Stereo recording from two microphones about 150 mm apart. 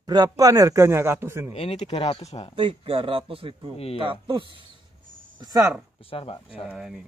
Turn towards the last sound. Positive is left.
turn(degrees=-5)  # may be behind; listen again after turning